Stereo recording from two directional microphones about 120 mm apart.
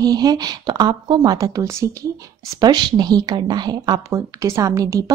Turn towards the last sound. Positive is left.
turn(degrees=-30)  # may be behind; listen again after turning